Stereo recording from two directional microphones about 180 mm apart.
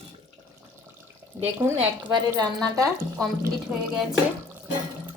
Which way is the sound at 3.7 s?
10° right (ahead or behind).